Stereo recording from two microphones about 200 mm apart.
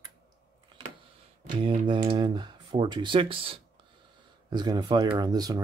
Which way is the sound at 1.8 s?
25° right (ahead or behind).